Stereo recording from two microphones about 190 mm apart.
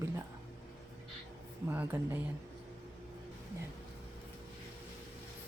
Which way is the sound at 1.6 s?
10° right (ahead or behind).